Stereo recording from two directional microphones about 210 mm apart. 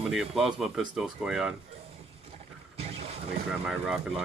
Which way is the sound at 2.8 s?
30° right (ahead or behind).